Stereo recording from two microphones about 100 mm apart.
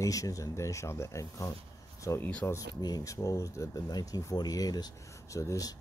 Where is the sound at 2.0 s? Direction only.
30° left (ahead or behind).